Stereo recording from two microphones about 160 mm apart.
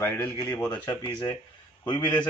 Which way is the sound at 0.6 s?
25° left (ahead or behind).